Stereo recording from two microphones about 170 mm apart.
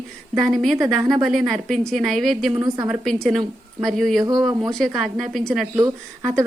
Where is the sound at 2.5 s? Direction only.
25° right (ahead or behind).